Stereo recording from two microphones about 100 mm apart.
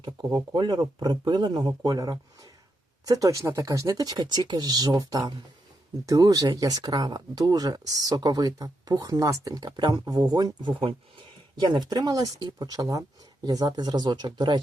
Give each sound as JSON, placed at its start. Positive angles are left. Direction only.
{"t": 0.0, "sound": "speech", "side_deg": -40}